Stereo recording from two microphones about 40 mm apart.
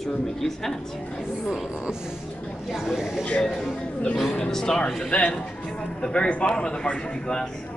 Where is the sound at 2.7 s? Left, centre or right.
Centre.